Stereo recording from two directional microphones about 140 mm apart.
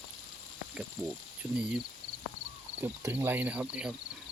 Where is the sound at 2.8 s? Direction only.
15° right (ahead or behind).